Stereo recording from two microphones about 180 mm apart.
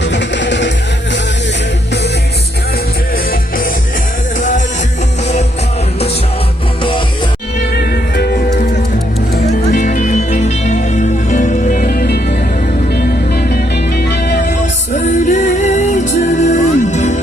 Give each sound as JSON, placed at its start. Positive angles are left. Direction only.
{"t": 0.1, "sound": "music", "side_deg": 80}
{"t": 7.8, "sound": "music", "side_deg": 60}
{"t": 9.5, "sound": "music", "side_deg": 45}
{"t": 14.6, "sound": "music", "side_deg": 40}